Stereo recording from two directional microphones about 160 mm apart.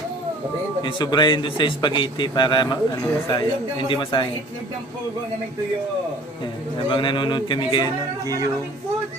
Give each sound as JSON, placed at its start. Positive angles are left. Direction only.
{"t": 0.8, "sound": "a man's voice", "side_deg": 30}
{"t": 6.8, "sound": "a man's voice", "side_deg": 30}
{"t": 8.2, "sound": "speech", "side_deg": -20}